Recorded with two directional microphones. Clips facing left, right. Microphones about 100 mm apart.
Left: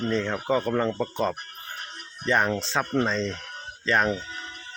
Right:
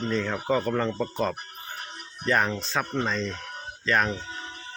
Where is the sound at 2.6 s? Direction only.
30° left (ahead or behind).